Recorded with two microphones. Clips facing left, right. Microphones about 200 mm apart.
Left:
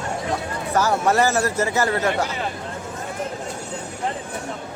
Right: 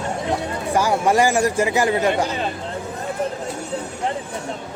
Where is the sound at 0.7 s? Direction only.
15° right (ahead or behind).